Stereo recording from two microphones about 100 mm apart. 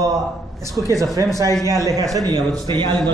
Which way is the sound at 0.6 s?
30° right (ahead or behind).